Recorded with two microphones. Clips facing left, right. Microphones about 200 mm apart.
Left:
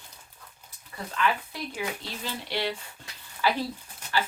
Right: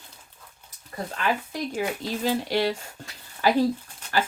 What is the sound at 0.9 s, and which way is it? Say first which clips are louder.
Speech: right 1 dB; 40° right (ahead or behind).